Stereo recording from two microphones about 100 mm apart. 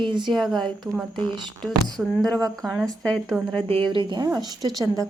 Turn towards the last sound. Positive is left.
turn(degrees=-35)  # may be behind; listen again after turning